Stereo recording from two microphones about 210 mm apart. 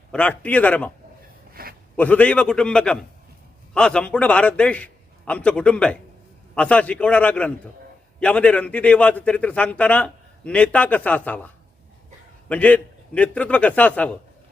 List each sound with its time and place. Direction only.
0.1 s a man's voice: 5° left (ahead or behind)
1.6 s a sound: 45° right (ahead or behind)
2.0 s a man's voice: 5° left (ahead or behind)